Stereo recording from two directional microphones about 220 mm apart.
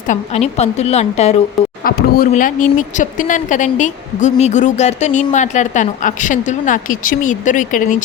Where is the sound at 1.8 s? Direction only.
40° left (ahead or behind).